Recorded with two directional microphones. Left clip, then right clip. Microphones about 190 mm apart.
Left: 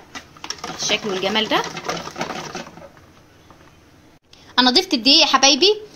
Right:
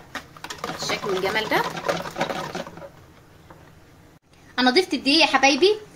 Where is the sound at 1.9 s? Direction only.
15° right (ahead or behind).